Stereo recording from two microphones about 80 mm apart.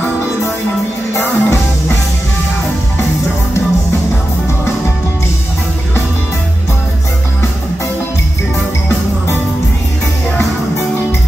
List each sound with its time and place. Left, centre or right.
1.1 s music: left